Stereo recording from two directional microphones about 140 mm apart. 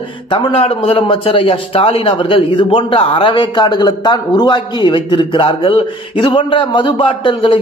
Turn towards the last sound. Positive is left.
turn(degrees=40)  # may be behind; listen again after turning